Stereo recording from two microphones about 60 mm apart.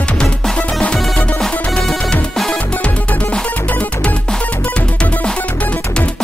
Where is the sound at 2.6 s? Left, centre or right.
Left.